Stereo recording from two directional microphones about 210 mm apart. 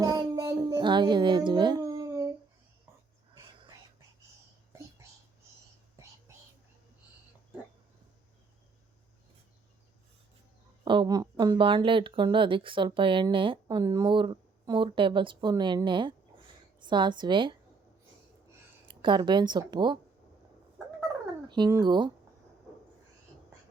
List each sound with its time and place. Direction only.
0.0 s music: 20° right (ahead or behind)
10.8 s speech: 20° right (ahead or behind)
18.9 s speech: 20° right (ahead or behind)
21.4 s speech: 20° right (ahead or behind)